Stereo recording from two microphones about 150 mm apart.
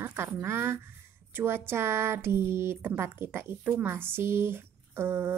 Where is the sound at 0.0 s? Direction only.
15° right (ahead or behind).